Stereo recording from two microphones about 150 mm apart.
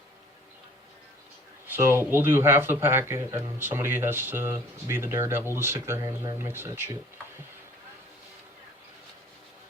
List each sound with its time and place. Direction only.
1.6 s speech: 15° right (ahead or behind)